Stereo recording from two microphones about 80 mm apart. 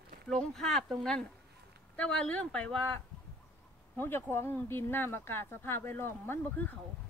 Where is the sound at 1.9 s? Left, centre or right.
Centre.